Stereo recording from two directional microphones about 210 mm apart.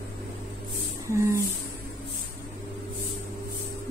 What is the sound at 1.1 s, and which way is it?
Speech, 15° right (ahead or behind).